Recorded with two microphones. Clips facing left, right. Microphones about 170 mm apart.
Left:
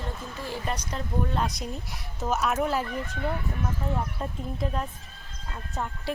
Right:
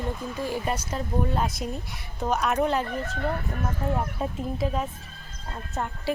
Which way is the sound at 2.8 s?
40° right (ahead or behind).